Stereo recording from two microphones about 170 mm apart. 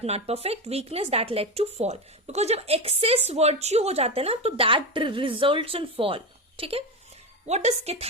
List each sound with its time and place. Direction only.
0.0 s speech: 40° right (ahead or behind)